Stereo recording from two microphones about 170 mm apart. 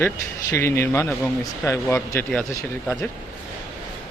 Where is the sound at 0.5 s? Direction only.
15° left (ahead or behind).